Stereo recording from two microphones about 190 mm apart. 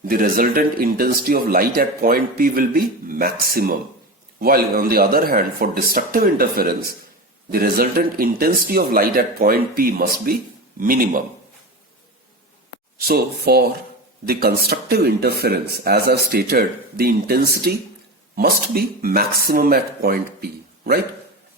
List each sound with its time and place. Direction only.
0.0 s a man's voice: 50° right (ahead or behind)
13.0 s a man's voice: 55° right (ahead or behind)